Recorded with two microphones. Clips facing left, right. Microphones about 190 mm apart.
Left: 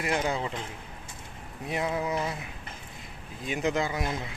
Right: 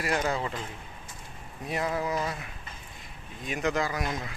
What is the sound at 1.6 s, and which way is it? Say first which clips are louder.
Speech: even; 20° left (ahead or behind).